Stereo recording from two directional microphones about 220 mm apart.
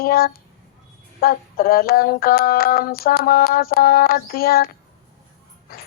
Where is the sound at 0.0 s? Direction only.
45° left (ahead or behind).